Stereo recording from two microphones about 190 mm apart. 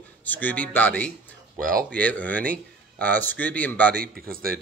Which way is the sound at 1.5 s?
50° right (ahead or behind).